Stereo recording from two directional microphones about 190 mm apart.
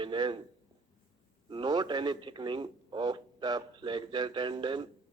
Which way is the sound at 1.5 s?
25° right (ahead or behind).